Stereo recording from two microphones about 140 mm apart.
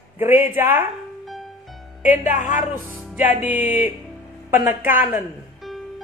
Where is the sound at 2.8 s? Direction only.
10° right (ahead or behind).